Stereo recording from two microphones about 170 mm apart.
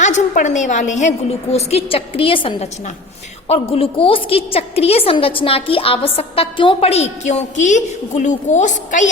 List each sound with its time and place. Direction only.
0.0 s a woman's voice: 45° left (ahead or behind)